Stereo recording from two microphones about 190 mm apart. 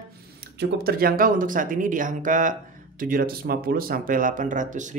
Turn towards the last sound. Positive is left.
turn(degrees=-40)  # may be behind; listen again after turning